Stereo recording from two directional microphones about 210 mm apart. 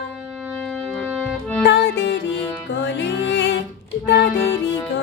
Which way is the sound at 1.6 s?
60° left (ahead or behind).